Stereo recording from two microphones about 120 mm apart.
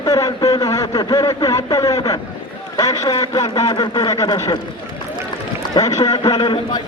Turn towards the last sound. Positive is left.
turn(degrees=40)  # may be behind; listen again after turning